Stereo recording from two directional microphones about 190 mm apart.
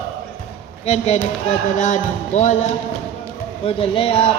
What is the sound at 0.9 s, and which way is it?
Speech, 35° left (ahead or behind).